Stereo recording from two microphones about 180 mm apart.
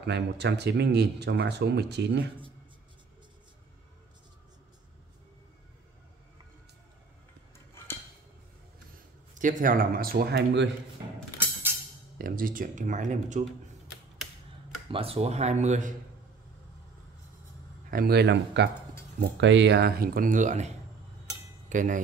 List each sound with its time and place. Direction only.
0.0 s speech: 70° right (ahead or behind)
7.5 s a sound: 15° left (ahead or behind)
9.3 s speech: 45° right (ahead or behind); by 10.7 s 70° right (ahead or behind)
12.2 s speech: 55° right (ahead or behind)
14.9 s speech: 30° right (ahead or behind)
17.9 s speech: 60° right (ahead or behind); by 22.0 s 45° right (ahead or behind)